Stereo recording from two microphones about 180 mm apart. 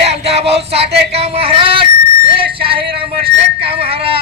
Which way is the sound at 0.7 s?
35° right (ahead or behind).